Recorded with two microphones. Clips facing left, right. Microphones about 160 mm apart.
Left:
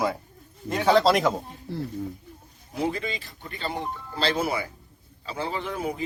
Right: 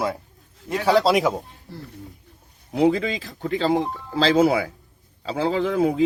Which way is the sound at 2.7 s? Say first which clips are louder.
Right 9 dB; 85° right.